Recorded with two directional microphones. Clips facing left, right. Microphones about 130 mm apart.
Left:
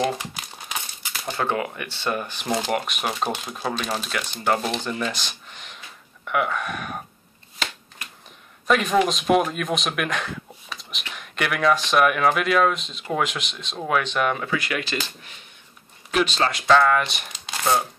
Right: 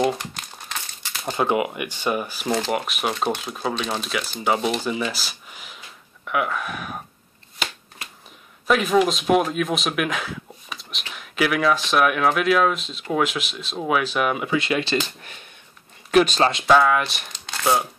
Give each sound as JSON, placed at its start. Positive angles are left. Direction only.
{"t": 0.0, "sound": "crumpling", "side_deg": 0}
{"t": 1.2, "sound": "speech", "side_deg": -15}
{"t": 8.6, "sound": "speech", "side_deg": 0}
{"t": 14.5, "sound": "speech", "side_deg": -25}
{"t": 16.1, "sound": "speech", "side_deg": -45}
{"t": 16.6, "sound": "speech", "side_deg": -5}